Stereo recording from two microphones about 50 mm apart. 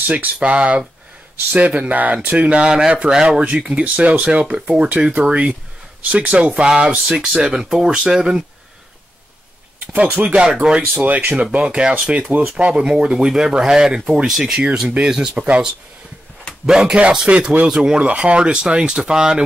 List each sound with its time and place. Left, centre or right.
0.0 s speech: right
9.9 s speech: right
11.0 s speech: right
12.8 s speech: centre
15.3 s speech: right
16.6 s speech: centre